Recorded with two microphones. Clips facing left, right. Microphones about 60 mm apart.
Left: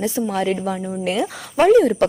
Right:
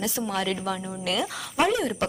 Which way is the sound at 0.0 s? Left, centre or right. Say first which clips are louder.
Left 7 dB; left.